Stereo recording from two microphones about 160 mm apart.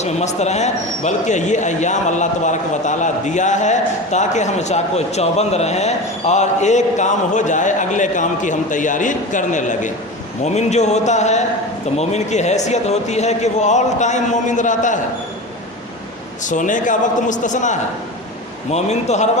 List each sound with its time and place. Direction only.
0.0 s speech: 45° left (ahead or behind)
16.4 s speech: 50° left (ahead or behind)